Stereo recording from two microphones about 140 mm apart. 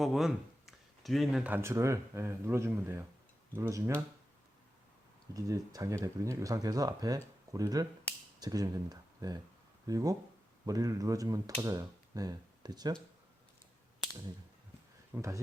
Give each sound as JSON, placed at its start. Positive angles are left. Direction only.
{"t": 0.0, "sound": "speech", "side_deg": 0}
{"t": 1.5, "sound": "speech", "side_deg": -15}
{"t": 5.3, "sound": "speech", "side_deg": -25}
{"t": 15.1, "sound": "speech", "side_deg": -20}